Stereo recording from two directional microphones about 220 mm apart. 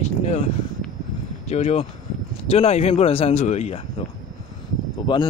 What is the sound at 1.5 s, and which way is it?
Speech, 30° left (ahead or behind).